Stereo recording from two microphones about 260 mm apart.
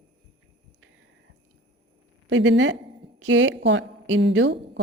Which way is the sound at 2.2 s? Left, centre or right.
Right.